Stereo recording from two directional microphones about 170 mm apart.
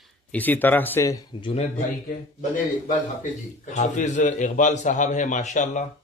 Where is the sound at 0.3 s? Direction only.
10° left (ahead or behind).